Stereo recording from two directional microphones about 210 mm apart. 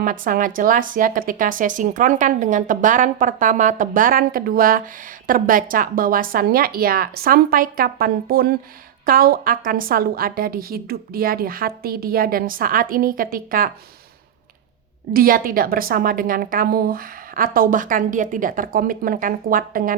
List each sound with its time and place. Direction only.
0.0 s a woman's voice: 40° right (ahead or behind)
15.1 s a woman's voice: 45° right (ahead or behind)